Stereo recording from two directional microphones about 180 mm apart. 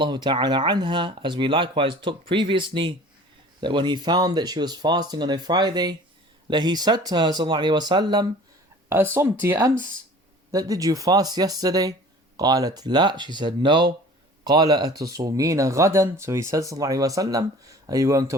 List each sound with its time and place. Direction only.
0.0 s speech: 25° right (ahead or behind)
9.4 s speech: 15° right (ahead or behind)